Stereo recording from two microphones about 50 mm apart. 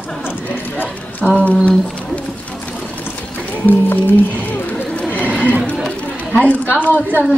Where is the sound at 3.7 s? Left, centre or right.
Left.